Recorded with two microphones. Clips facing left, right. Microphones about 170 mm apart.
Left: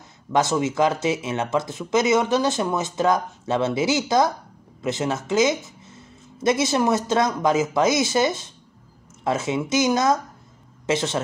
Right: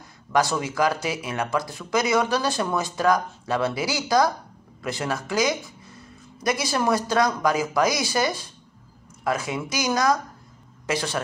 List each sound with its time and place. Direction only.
0.3 s speech: 20° left (ahead or behind)